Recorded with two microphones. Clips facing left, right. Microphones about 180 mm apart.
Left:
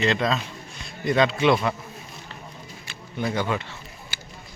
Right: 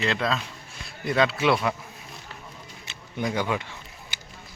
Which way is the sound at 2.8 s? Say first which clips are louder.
Left 1 dB; 20° right (ahead or behind).